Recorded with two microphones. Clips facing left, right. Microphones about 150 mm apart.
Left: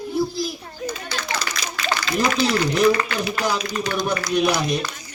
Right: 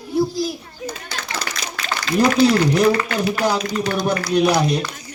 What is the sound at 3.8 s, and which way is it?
Speech, 40° right (ahead or behind).